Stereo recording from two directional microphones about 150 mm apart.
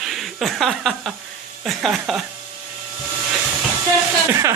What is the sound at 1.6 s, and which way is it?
Speech, centre (ahead or behind).